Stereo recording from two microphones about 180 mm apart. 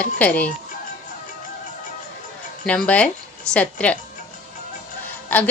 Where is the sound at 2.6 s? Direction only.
5° left (ahead or behind).